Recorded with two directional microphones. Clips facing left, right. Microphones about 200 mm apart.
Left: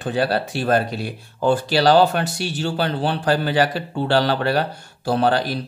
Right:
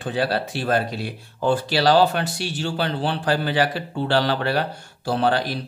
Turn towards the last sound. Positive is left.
turn(degrees=45)  # may be behind; listen again after turning